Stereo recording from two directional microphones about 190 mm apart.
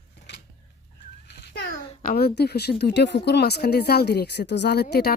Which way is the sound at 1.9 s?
45° left (ahead or behind).